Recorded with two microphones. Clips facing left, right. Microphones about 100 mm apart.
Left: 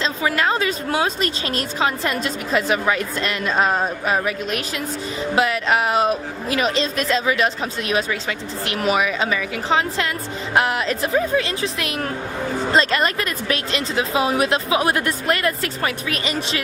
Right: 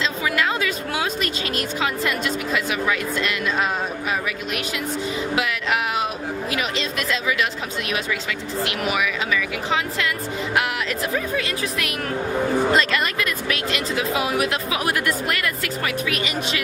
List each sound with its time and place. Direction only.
0.0 s speech: 35° left (ahead or behind)